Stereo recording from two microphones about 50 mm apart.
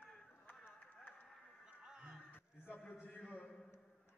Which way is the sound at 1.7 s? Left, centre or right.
Centre.